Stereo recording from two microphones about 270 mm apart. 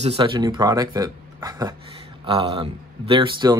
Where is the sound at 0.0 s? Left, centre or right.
Centre.